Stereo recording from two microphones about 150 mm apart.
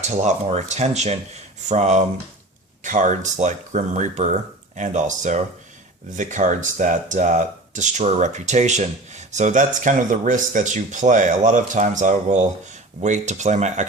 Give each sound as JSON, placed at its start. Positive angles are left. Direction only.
{"t": 0.0, "sound": "speech", "side_deg": -50}